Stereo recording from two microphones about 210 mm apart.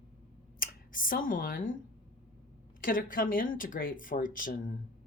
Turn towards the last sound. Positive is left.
turn(degrees=40)  # may be behind; listen again after turning